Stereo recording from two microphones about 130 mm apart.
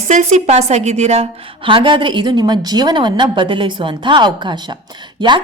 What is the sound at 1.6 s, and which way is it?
A woman's voice, 40° right (ahead or behind).